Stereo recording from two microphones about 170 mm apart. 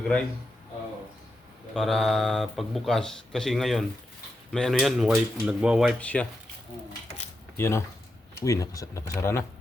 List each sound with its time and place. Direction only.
1.7 s speech: centre (ahead or behind)
6.0 s speech: 5° left (ahead or behind)
7.5 s speech: 15° left (ahead or behind)